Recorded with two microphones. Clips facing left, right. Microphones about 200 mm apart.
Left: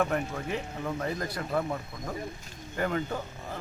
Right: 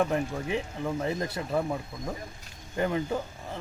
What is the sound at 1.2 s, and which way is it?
Speech, 25° right (ahead or behind).